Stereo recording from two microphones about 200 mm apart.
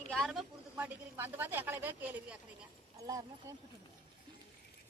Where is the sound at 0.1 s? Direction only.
Centre (ahead or behind).